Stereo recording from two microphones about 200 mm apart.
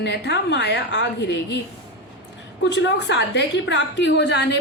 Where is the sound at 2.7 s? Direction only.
60° left (ahead or behind).